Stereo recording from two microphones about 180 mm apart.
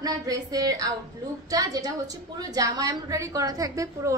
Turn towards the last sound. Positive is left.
turn(degrees=-15)  # may be behind; listen again after turning